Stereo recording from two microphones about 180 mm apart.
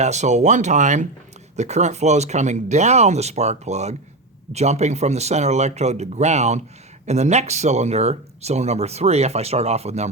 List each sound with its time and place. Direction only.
0.0 s speech: 40° right (ahead or behind)